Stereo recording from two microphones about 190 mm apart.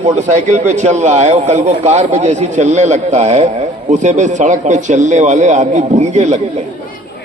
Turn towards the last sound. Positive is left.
turn(degrees=-40)  # may be behind; listen again after turning